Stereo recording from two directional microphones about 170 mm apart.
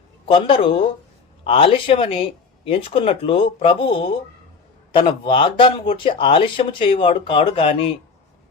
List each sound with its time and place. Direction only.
0.3 s speech: 30° left (ahead or behind)